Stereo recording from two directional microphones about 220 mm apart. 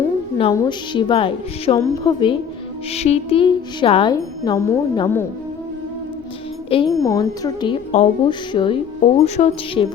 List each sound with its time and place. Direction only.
0.3 s speech: 20° left (ahead or behind)
6.7 s speech: 20° left (ahead or behind)